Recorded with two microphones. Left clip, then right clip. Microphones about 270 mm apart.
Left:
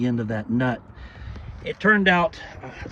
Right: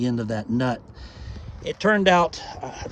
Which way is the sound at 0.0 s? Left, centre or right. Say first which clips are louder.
Even; centre.